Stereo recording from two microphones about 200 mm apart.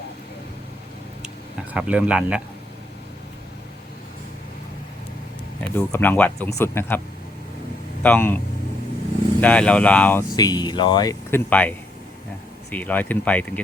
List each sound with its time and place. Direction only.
1.7 s speech: 5° right (ahead or behind)
5.5 s speech: 10° left (ahead or behind)
8.0 s speech: 10° left (ahead or behind)
9.4 s speech: 5° left (ahead or behind)
10.3 s speech: 20° left (ahead or behind)
12.7 s speech: 10° left (ahead or behind)